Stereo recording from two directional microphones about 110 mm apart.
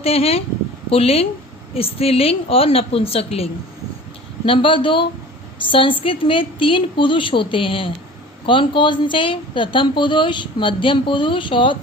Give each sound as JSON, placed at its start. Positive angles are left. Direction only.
{"t": 0.0, "sound": "a woman's voice", "side_deg": 65}
{"t": 5.5, "sound": "a sound", "side_deg": 50}
{"t": 6.0, "sound": "speech", "side_deg": 55}